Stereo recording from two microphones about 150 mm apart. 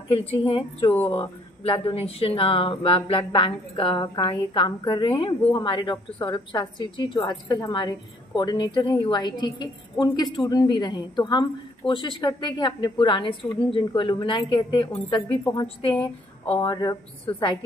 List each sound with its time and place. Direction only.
0.4 s speech: 35° left (ahead or behind)
0.8 s speech: 15° left (ahead or behind)
1.1 s speech: 40° left (ahead or behind)